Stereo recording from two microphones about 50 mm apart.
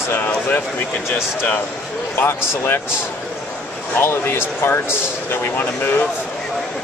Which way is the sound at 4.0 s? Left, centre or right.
Left.